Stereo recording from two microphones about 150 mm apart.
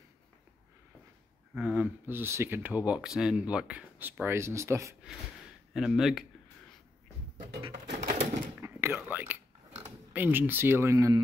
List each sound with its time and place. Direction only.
1.5 s speech: 10° right (ahead or behind)
5.7 s speech: 5° right (ahead or behind)
7.7 s typewriter: 60° right (ahead or behind)
8.5 s whispering: 15° right (ahead or behind)
10.1 s speech: 10° right (ahead or behind)